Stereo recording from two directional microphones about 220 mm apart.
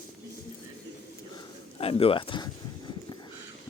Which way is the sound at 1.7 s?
25° left (ahead or behind).